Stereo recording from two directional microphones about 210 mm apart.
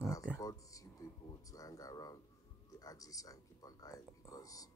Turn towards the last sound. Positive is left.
turn(degrees=15)  # may be behind; listen again after turning